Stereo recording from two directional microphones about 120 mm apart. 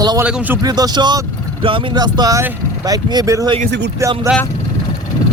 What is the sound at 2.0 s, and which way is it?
Speech, 30° right (ahead or behind).